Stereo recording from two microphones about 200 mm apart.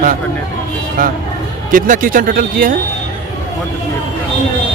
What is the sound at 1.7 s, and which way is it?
Speech, 45° right (ahead or behind).